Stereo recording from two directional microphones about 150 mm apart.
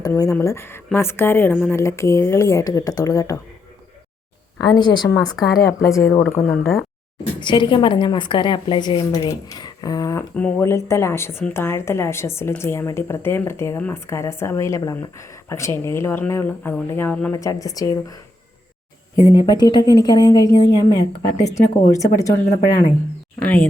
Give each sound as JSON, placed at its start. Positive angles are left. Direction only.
{"t": 0.0, "sound": "a woman's voice", "side_deg": 20}
{"t": 4.6, "sound": "speech", "side_deg": 30}
{"t": 6.4, "sound": "speech", "side_deg": 0}
{"t": 7.3, "sound": "a woman's voice", "side_deg": 30}
{"t": 9.3, "sound": "speech", "side_deg": 25}
{"t": 10.3, "sound": "a woman's voice", "side_deg": 15}
{"t": 17.3, "sound": "speech", "side_deg": 20}
{"t": 23.4, "sound": "a woman's voice", "side_deg": 10}